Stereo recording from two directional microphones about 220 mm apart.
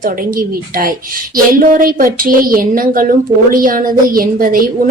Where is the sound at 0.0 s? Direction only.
40° right (ahead or behind).